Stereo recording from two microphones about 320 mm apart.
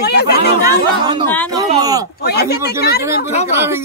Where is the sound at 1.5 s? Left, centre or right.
Centre.